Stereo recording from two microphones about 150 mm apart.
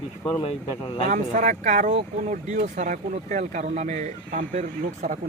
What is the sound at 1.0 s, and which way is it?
Speech, 60° right (ahead or behind).